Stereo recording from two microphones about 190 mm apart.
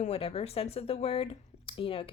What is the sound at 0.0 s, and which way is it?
Speech, 30° left (ahead or behind).